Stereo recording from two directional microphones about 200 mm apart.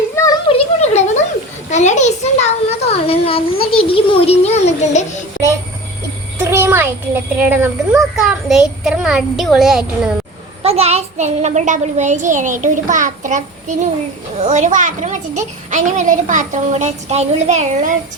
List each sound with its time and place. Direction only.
0.3 s a sound: 30° left (ahead or behind)
1.7 s a child's voice: 35° left (ahead or behind)
6.4 s a child's voice: 10° right (ahead or behind)
10.6 s a child's voice: 30° right (ahead or behind)